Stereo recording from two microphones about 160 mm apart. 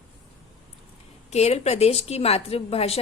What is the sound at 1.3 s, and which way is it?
A woman's voice, 40° left (ahead or behind).